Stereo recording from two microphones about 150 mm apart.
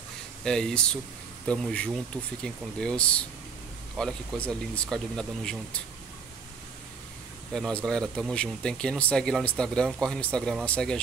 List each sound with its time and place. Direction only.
0.4 s speech: 5° left (ahead or behind)
7.5 s speech: 5° left (ahead or behind)